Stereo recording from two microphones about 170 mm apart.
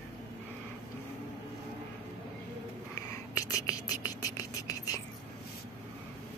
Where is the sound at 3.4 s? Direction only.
20° left (ahead or behind).